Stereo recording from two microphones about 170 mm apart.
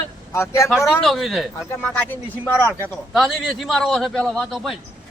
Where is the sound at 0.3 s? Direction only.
15° left (ahead or behind).